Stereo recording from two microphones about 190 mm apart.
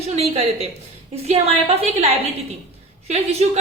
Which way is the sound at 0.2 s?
35° right (ahead or behind).